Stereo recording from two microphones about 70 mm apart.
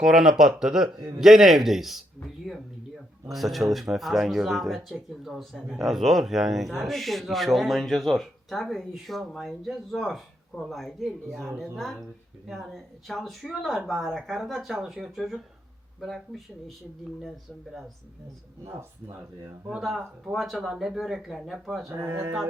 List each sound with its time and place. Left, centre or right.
0.0 s speech: centre
20.3 s speech: centre
22.0 s speech: right